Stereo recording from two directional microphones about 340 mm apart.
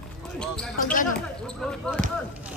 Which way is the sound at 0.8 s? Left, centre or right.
Left.